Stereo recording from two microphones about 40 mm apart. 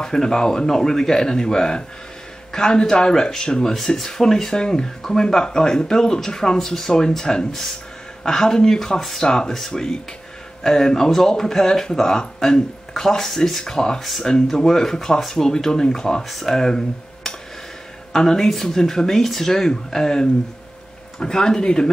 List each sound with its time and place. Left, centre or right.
0.0 s speech: centre